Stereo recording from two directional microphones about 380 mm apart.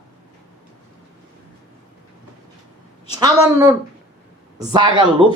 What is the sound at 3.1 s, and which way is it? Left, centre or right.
A man's voice, centre.